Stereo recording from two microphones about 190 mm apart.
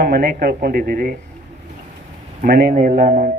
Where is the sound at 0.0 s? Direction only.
50° right (ahead or behind).